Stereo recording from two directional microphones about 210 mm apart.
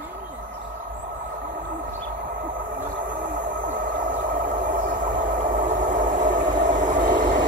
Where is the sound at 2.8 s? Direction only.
35° right (ahead or behind).